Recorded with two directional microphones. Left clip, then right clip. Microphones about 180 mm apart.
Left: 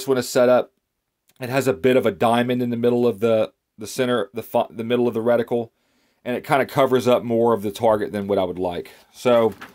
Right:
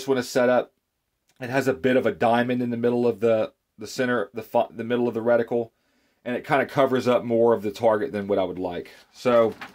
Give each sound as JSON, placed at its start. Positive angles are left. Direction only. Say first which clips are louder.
{"t": 0.0, "sound": "speech", "louder": "left 4 dB", "side_deg": 40}